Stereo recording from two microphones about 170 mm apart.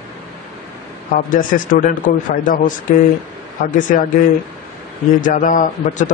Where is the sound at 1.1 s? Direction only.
50° left (ahead or behind).